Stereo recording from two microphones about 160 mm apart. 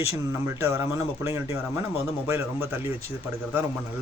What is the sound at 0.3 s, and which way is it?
A man's voice, 15° right (ahead or behind).